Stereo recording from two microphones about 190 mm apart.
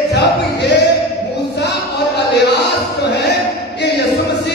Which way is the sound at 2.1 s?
65° left (ahead or behind).